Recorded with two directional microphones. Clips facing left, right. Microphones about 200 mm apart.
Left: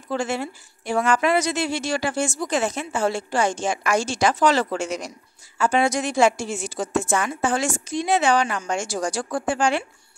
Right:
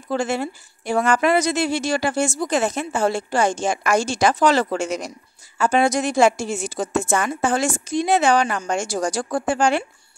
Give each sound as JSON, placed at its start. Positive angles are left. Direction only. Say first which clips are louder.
{"t": 0.1, "sound": "a woman's voice", "louder": "right 3 dB", "side_deg": -40}